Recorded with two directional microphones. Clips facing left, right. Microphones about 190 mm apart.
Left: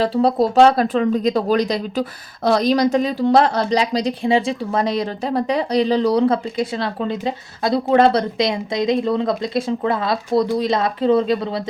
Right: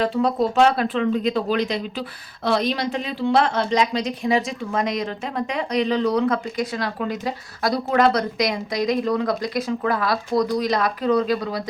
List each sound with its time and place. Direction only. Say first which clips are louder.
0.0 s speech: left 4 dB; 35° left (ahead or behind)